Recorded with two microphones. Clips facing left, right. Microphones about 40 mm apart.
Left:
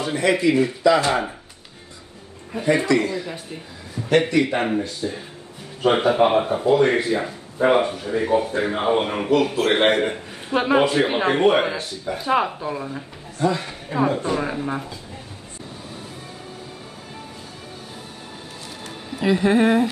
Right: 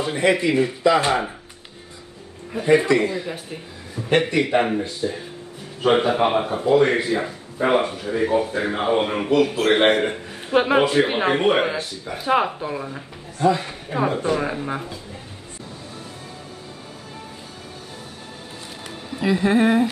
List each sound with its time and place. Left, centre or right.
0.3 s speech: centre
0.8 s speech: centre
2.5 s speech: centre
19.1 s speech: centre